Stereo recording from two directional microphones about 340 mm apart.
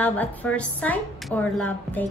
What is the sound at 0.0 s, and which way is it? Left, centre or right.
A woman's voice, centre.